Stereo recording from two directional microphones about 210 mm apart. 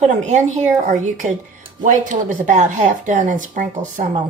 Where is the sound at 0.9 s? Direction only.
35° right (ahead or behind).